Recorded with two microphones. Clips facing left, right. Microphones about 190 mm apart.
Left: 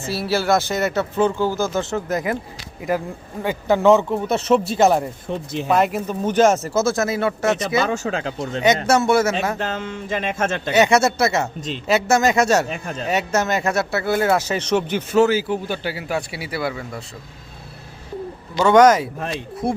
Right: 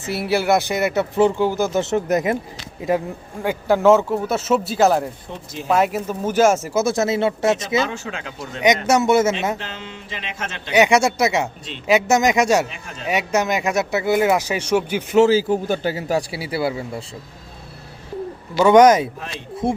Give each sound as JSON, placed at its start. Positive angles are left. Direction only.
{"t": 0.0, "sound": "speech", "side_deg": -20}
{"t": 3.4, "sound": "speech", "side_deg": -10}
{"t": 6.9, "sound": "speech", "side_deg": -25}
{"t": 7.9, "sound": "speech", "side_deg": 40}
{"t": 8.9, "sound": "speech", "side_deg": -20}
{"t": 9.6, "sound": "music", "side_deg": 45}
{"t": 10.7, "sound": "speech", "side_deg": -15}
{"t": 12.6, "sound": "music", "side_deg": 45}
{"t": 13.1, "sound": "speech", "side_deg": -15}
{"t": 15.2, "sound": "a man's voice", "side_deg": -30}
{"t": 18.5, "sound": "speech", "side_deg": -15}